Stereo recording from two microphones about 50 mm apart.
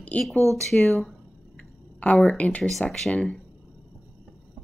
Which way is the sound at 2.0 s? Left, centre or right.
Left.